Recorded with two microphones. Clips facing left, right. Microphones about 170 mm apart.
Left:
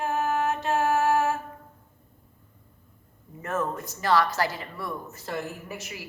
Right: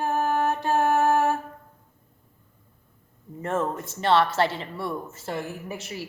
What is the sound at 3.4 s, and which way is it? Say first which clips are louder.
Speech: right 2 dB; 25° right (ahead or behind).